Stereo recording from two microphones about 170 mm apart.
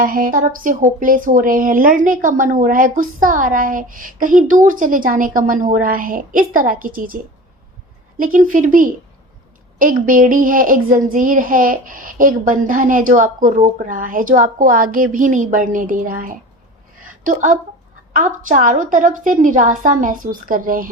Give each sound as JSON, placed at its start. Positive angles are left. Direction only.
{"t": 0.0, "sound": "speech", "side_deg": -55}
{"t": 8.2, "sound": "speech", "side_deg": -50}